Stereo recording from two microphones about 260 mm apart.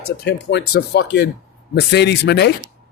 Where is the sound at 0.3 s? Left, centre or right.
Left.